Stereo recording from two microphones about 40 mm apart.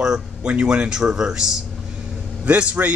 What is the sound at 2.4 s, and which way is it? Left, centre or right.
Speech, right.